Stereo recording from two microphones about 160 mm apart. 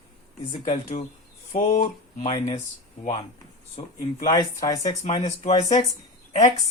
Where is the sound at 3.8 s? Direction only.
40° left (ahead or behind).